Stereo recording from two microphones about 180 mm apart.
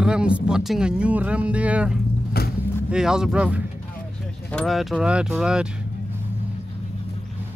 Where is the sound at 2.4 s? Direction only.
60° left (ahead or behind).